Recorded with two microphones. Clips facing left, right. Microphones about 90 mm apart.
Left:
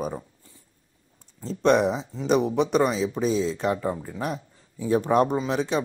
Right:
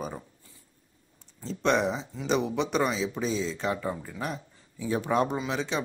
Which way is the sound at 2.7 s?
5° left (ahead or behind).